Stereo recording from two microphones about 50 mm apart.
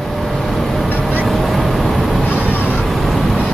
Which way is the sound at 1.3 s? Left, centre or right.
Centre.